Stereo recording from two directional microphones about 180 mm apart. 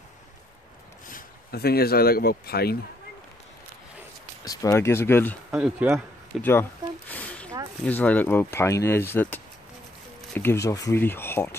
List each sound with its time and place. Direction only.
1.0 s speech: 55° left (ahead or behind)
4.5 s speech: 20° left (ahead or behind)
5.5 s speech: 5° right (ahead or behind)
7.1 s a sound: 10° left (ahead or behind)
7.8 s speech: 10° left (ahead or behind)